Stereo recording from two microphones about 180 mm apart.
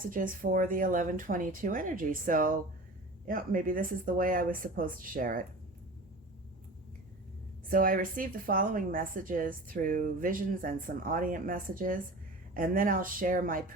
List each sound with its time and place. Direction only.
0.1 s a woman's voice: 50° right (ahead or behind)
7.7 s a woman's voice: 50° right (ahead or behind)